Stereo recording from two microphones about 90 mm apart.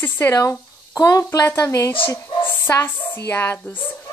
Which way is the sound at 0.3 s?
40° left (ahead or behind).